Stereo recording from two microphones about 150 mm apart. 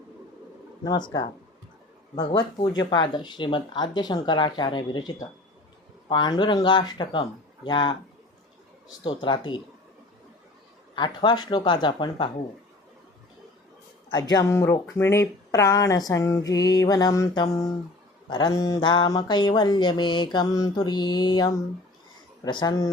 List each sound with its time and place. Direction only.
0.9 s speech: 30° left (ahead or behind)
2.7 s speech: 30° left (ahead or behind)
9.0 s speech: 30° left (ahead or behind)
10.9 s speech: 30° left (ahead or behind)
14.1 s speech: 25° left (ahead or behind)